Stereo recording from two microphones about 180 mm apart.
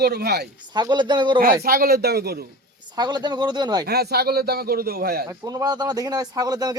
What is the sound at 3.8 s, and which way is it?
A man's voice, 60° right (ahead or behind).